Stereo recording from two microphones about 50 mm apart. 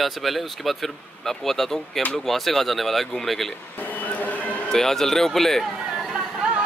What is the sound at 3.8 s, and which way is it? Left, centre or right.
Music, left.